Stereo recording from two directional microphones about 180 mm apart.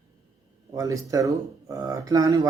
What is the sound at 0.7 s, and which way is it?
Speech, 20° right (ahead or behind).